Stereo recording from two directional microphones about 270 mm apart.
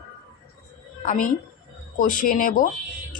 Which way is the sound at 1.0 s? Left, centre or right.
Left.